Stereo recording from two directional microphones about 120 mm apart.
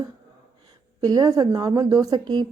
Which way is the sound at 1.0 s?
30° right (ahead or behind).